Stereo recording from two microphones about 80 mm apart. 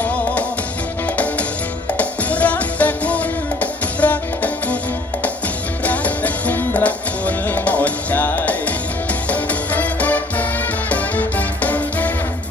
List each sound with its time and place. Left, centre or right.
0.0 s music: centre
2.0 s music: centre
5.9 s music: centre